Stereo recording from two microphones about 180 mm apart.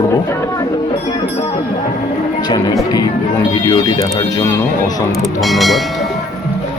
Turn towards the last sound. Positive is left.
turn(degrees=0)  # may be behind; listen again after turning